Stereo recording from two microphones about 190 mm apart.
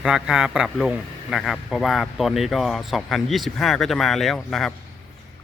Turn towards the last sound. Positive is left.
turn(degrees=0)  # may be behind; listen again after turning